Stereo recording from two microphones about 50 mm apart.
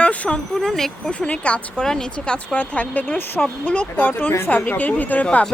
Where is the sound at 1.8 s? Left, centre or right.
Centre.